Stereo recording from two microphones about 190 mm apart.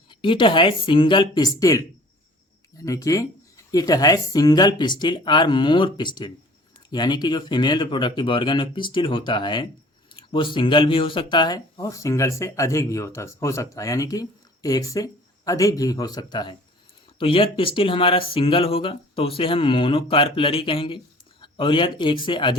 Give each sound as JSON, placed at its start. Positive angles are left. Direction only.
{"t": 0.1, "sound": "speech", "side_deg": 25}